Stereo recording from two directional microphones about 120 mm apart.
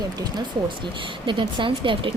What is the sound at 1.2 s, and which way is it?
Speech, 45° right (ahead or behind).